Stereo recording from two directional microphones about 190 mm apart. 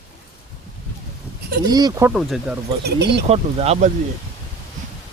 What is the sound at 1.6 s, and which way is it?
Speech, 20° right (ahead or behind).